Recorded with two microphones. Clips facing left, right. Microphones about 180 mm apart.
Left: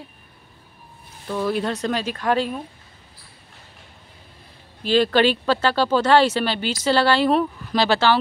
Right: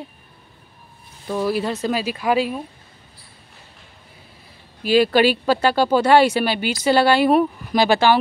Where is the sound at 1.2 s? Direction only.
10° right (ahead or behind).